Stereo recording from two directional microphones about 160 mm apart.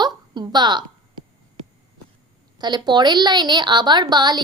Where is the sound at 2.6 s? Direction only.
25° right (ahead or behind).